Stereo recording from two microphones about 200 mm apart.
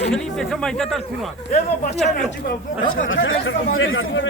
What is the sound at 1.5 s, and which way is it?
Speech, 35° left (ahead or behind).